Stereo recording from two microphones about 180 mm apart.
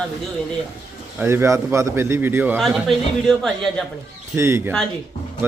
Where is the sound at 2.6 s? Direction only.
Centre (ahead or behind).